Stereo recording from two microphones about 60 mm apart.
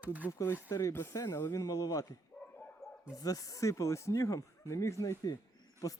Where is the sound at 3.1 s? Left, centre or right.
Left.